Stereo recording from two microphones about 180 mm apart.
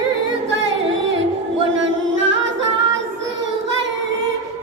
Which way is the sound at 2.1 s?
90° right.